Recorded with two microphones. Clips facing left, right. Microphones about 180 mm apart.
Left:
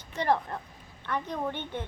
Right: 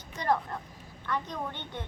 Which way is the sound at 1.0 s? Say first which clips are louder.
Left 1 dB; 10° left (ahead or behind).